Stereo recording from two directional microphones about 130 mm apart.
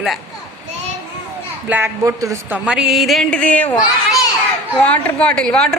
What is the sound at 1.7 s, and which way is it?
Speech, 15° right (ahead or behind).